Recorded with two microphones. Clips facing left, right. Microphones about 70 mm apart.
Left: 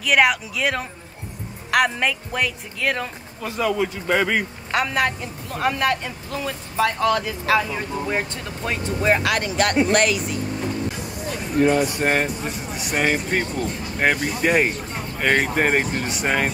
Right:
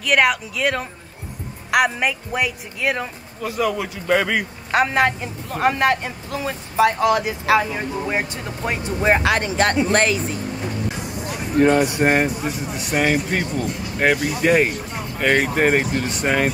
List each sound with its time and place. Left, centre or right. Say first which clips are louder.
0.0 s speech: even; centre
3.8 s a man's voice: right 1 dB; right
4.8 s speech: right 4 dB; right
11.8 s speech: right 3 dB; centre
12.4 s speech: right 3 dB; centre